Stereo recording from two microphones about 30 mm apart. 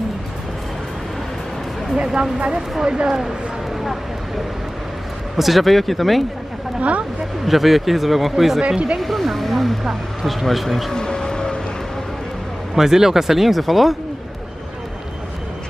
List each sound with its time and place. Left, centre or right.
2.8 s speech: right
5.4 s speech: centre
6.8 s speech: right
7.4 s speech: centre
8.6 s speech: right
9.0 s speech: centre
10.9 s a sound: left
12.7 s speech: centre